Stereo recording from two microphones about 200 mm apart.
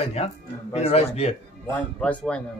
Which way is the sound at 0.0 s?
30° left (ahead or behind).